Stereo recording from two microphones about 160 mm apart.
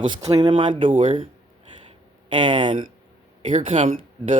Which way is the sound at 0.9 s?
55° right (ahead or behind).